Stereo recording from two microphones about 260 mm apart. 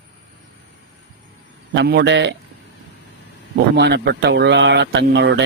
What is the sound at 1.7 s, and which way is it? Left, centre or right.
Speech, right.